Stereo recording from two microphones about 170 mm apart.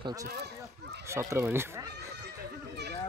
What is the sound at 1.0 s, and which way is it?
Speech, 15° right (ahead or behind).